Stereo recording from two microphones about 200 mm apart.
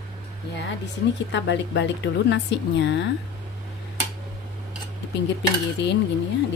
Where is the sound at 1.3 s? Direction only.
65° left (ahead or behind).